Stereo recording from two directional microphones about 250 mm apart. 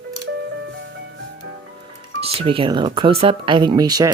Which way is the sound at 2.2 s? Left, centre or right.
Right.